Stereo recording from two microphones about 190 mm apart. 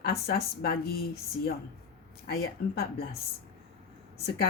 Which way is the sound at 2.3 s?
55° left (ahead or behind).